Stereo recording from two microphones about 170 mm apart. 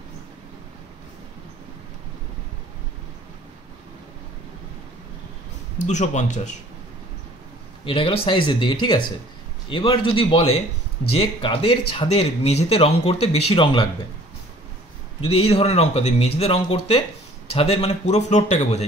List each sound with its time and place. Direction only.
5.8 s speech: 45° left (ahead or behind)
7.8 s speech: 30° left (ahead or behind)
15.2 s speech: 35° left (ahead or behind)